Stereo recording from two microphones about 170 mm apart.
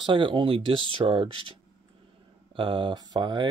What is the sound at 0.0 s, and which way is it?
Speech, 30° right (ahead or behind).